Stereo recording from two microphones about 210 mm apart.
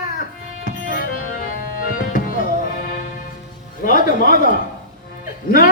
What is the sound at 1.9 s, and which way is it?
Tabla, 40° left (ahead or behind).